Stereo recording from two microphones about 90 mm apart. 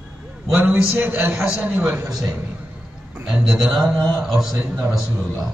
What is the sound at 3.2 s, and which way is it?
A man's voice, 10° right (ahead or behind).